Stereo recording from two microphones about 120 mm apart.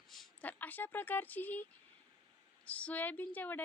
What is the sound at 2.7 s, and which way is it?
Speech, 10° left (ahead or behind).